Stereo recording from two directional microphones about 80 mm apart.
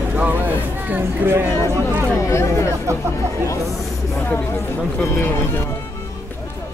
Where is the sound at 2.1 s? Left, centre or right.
Left.